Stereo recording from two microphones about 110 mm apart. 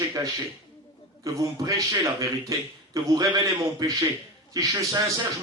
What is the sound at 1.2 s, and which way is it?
A man's voice, 30° right (ahead or behind).